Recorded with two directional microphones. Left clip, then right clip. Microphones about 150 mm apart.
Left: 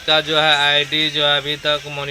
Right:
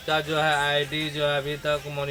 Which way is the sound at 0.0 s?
15° left (ahead or behind).